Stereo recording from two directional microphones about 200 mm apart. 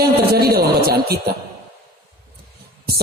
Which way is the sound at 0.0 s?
50° right (ahead or behind).